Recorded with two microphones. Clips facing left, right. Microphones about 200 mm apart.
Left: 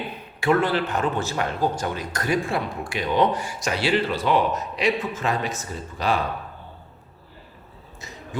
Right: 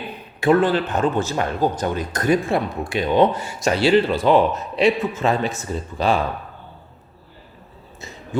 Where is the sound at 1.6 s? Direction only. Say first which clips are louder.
Right 5 dB; 20° right (ahead or behind).